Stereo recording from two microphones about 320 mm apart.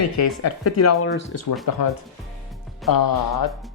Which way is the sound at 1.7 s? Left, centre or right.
Left.